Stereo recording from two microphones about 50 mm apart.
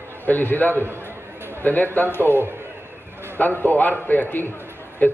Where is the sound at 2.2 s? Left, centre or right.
Right.